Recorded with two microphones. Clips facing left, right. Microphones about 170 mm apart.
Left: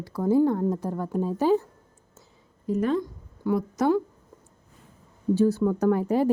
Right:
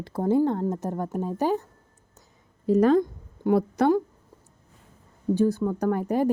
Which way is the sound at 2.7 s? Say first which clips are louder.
Right 6 dB; 90° right.